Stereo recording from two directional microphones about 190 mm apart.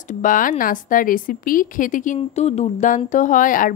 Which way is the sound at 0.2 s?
45° left (ahead or behind).